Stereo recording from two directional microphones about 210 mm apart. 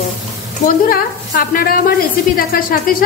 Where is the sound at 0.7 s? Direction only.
45° left (ahead or behind).